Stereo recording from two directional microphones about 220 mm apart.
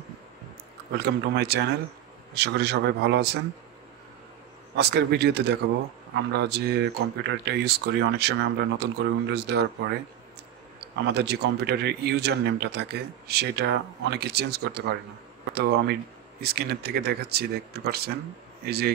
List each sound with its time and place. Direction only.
0.9 s speech: 50° right (ahead or behind)
4.7 s speech: 45° right (ahead or behind)
11.1 s speech: 45° right (ahead or behind)